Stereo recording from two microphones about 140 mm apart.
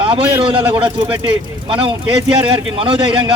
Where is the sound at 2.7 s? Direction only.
40° right (ahead or behind).